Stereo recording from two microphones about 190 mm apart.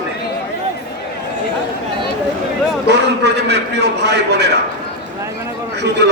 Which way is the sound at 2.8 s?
60° right (ahead or behind).